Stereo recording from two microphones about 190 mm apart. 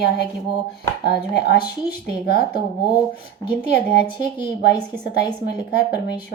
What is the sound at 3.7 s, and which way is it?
A woman's voice, 55° left (ahead or behind).